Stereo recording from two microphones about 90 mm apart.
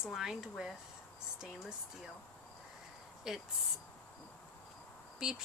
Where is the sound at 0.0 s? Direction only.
5° right (ahead or behind).